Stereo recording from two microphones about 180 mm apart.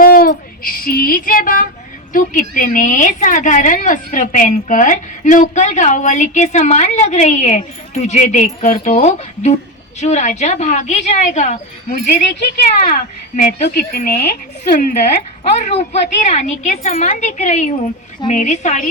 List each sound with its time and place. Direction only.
0.0 s music: 55° left (ahead or behind)
2.1 s a woman's voice: 50° left (ahead or behind)